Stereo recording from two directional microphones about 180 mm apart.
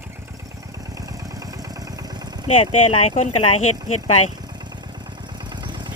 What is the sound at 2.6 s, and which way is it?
Speech, 30° left (ahead or behind).